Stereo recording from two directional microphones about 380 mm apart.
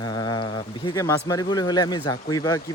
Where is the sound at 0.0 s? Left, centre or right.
Centre.